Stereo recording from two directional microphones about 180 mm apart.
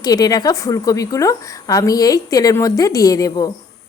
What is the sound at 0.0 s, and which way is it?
A woman's voice, 20° left (ahead or behind).